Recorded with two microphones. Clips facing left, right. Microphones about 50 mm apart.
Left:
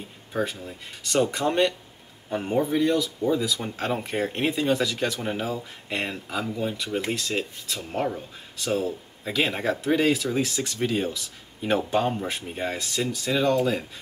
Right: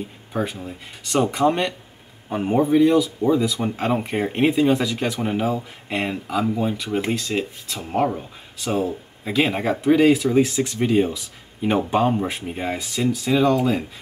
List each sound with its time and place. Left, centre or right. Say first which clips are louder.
0.3 s speech: right 2 dB; centre